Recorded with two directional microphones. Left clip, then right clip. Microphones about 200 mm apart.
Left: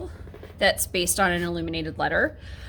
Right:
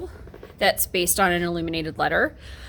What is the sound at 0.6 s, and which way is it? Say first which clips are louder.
Speech: right 1 dB; 15° right (ahead or behind).